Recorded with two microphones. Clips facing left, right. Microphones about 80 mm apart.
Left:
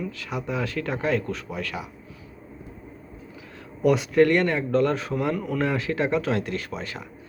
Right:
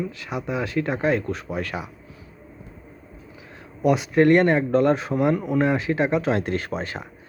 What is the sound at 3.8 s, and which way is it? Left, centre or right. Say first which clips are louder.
Speech: even; centre.